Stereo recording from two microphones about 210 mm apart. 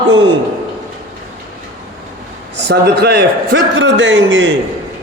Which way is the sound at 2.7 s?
50° right (ahead or behind).